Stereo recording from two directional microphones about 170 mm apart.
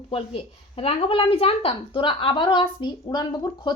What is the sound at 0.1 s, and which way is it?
A woman's voice, 35° left (ahead or behind).